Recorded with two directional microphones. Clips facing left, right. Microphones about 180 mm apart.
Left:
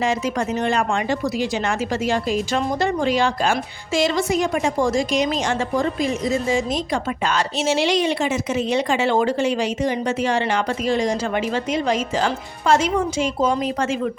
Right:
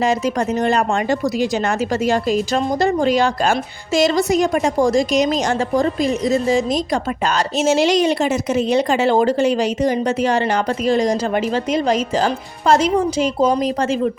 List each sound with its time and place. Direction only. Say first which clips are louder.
0.0 s a woman's voice: right 4 dB; 40° right (ahead or behind)